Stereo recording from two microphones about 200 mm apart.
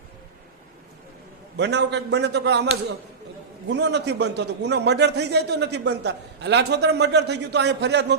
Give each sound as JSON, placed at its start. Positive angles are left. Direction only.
{"t": 1.5, "sound": "a man's voice", "side_deg": -60}
{"t": 3.7, "sound": "a man's voice", "side_deg": -60}